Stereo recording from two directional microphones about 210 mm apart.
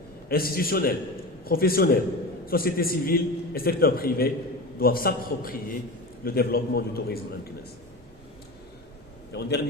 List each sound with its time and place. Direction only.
0.3 s a man's voice: 45° left (ahead or behind)
9.3 s a man's voice: 50° left (ahead or behind)